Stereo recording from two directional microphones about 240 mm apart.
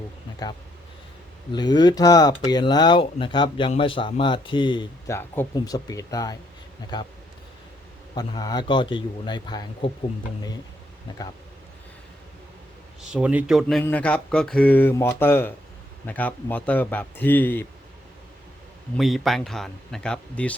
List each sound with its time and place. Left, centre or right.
1.5 s speech: centre
8.1 s speech: centre
13.0 s speech: centre
18.9 s speech: centre